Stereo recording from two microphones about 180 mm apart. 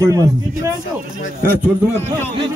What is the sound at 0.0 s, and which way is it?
A man's voice, 20° right (ahead or behind).